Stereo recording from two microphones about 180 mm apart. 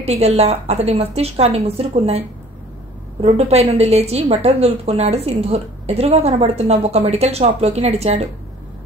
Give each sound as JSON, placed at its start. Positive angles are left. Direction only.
{"t": 0.0, "sound": "a woman's voice", "side_deg": -35}